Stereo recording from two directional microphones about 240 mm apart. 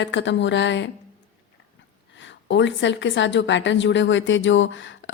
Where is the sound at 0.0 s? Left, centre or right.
Left.